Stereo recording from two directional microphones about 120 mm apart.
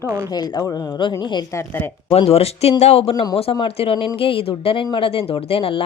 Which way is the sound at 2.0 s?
55° left (ahead or behind).